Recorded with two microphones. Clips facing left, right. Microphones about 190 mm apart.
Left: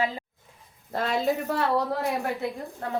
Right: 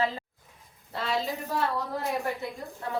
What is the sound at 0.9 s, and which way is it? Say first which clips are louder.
Speech: left 4 dB; 50° left (ahead or behind).